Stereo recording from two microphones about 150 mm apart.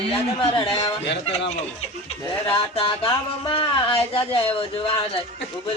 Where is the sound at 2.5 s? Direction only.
35° left (ahead or behind).